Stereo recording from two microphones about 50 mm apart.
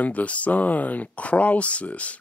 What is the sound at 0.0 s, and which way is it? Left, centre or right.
Speech, left.